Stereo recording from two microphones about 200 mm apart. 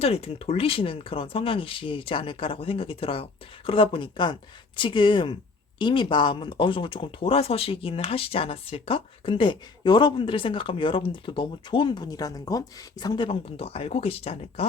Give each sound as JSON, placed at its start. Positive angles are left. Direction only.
{"t": 0.0, "sound": "speech", "side_deg": 30}